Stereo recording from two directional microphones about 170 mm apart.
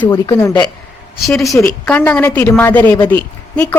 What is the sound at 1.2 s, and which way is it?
A woman's voice, centre (ahead or behind).